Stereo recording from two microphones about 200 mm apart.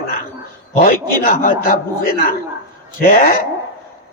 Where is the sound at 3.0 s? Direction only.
45° left (ahead or behind).